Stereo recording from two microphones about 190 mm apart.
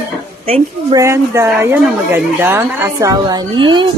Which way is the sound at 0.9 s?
15° right (ahead or behind).